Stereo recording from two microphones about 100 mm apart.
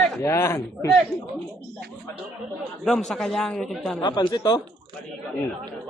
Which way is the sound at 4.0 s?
50° left (ahead or behind).